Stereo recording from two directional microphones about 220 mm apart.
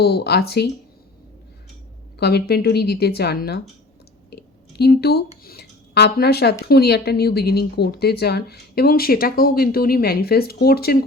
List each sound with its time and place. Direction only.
0.0 s speech: 45° left (ahead or behind)
2.1 s speech: 45° left (ahead or behind)
4.3 s a sound: 45° left (ahead or behind)
5.4 s speech: 45° left (ahead or behind)